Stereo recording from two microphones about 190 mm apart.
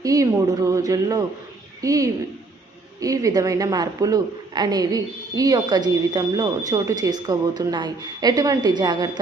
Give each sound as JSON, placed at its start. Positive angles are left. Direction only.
{"t": 0.0, "sound": "a woman's voice", "side_deg": -15}